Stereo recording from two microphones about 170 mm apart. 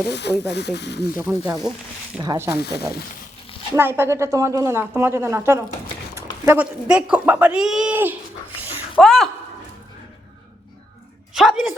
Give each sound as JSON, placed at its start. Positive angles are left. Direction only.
{"t": 0.1, "sound": "speech", "side_deg": 85}
{"t": 1.2, "sound": "speech", "side_deg": -5}
{"t": 2.2, "sound": "speech", "side_deg": -20}
{"t": 2.6, "sound": "speech", "side_deg": 75}
{"t": 3.8, "sound": "speech", "side_deg": -15}
{"t": 11.3, "sound": "speech", "side_deg": 0}